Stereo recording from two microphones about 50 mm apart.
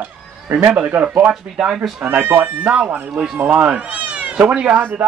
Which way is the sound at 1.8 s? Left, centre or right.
Right.